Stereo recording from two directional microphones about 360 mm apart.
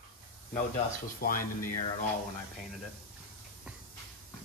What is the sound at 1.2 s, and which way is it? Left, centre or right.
Speech, left.